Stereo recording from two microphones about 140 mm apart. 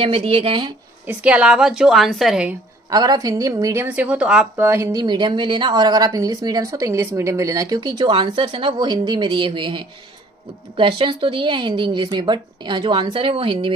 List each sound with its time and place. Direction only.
0.0 s speech: 40° right (ahead or behind)
1.0 s a woman's voice: 10° right (ahead or behind)
2.9 s a woman's voice: 30° right (ahead or behind)
3.8 s speech: 10° right (ahead or behind)
4.6 s speech: 20° right (ahead or behind)
5.0 s speech: 35° right (ahead or behind)